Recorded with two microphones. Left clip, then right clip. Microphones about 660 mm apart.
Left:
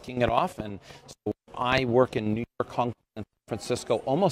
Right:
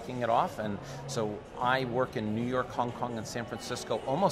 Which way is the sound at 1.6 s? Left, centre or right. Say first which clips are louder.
Left 5 dB; left.